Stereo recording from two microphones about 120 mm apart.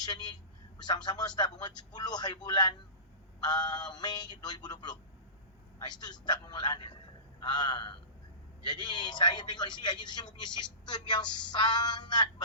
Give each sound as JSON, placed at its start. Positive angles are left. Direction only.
{"t": 0.0, "sound": "a man's voice", "side_deg": 35}